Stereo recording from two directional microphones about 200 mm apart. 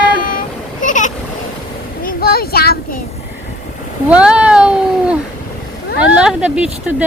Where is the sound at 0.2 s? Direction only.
45° left (ahead or behind).